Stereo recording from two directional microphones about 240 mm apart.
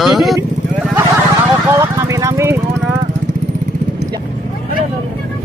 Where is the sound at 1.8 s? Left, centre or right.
Centre.